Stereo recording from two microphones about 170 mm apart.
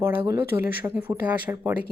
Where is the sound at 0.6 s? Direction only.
65° left (ahead or behind).